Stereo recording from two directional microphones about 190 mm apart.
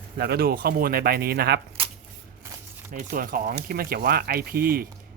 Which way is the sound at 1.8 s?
30° right (ahead or behind).